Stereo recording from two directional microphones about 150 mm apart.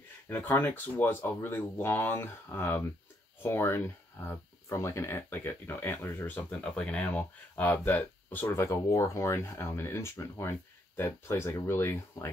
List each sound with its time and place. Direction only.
0.3 s speech: 15° left (ahead or behind)